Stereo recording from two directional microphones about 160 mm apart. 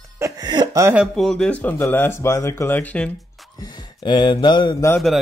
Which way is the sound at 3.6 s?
30° left (ahead or behind).